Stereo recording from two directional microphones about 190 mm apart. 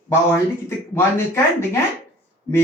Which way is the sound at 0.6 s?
15° left (ahead or behind).